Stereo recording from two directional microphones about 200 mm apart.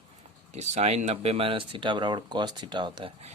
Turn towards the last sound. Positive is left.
turn(degrees=-30)  # may be behind; listen again after turning